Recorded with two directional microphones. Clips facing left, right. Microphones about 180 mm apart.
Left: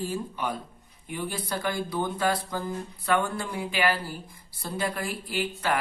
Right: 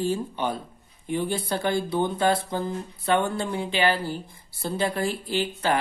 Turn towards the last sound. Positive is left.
turn(degrees=-25)  # may be behind; listen again after turning